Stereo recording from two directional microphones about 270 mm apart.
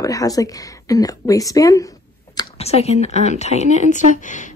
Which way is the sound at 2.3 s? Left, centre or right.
Left.